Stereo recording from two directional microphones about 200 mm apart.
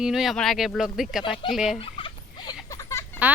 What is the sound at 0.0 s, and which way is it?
Speech, centre (ahead or behind).